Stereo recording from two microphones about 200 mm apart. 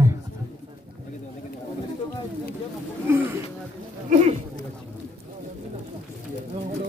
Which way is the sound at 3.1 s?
10° right (ahead or behind).